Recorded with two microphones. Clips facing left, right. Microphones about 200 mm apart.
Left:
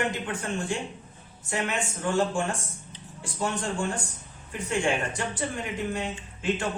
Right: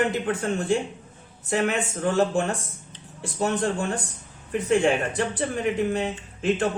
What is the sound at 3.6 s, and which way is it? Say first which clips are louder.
Speech: right 4 dB; 40° right (ahead or behind).